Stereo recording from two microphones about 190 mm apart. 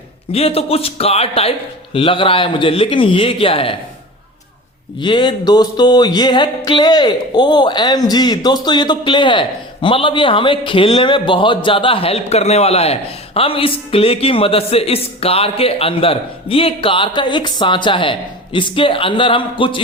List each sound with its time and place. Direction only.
0.3 s a man's voice: 30° left (ahead or behind)
4.9 s a man's voice: 25° left (ahead or behind)